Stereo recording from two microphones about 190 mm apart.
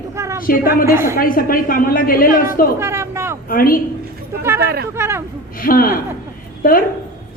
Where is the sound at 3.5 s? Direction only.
50° left (ahead or behind).